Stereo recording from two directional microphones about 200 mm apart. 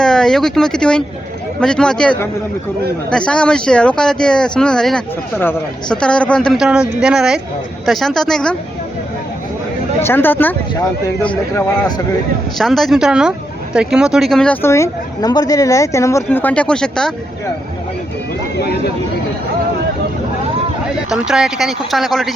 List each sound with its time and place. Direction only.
0.0 s speech: 5° left (ahead or behind)
10.0 s speech: 10° left (ahead or behind)
18.5 s speech: 55° left (ahead or behind)
20.8 s speech: 5° right (ahead or behind)